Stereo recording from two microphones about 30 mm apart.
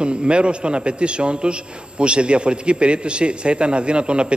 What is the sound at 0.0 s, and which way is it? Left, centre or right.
A man's voice, right.